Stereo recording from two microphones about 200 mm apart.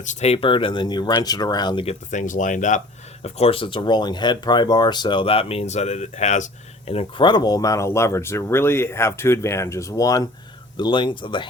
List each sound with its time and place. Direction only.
0.0 s speech: 35° left (ahead or behind)